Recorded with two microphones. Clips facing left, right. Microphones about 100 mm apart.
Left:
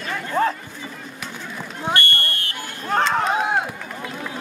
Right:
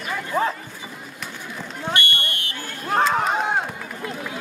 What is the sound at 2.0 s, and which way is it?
Fire alarm, 15° right (ahead or behind).